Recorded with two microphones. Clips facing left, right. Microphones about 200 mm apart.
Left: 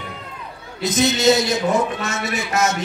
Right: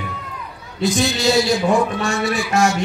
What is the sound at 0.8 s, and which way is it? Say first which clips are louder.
A man's voice: left 2 dB; 20° left (ahead or behind).